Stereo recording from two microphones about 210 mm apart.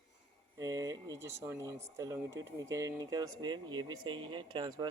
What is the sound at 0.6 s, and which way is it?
Speech, 15° right (ahead or behind).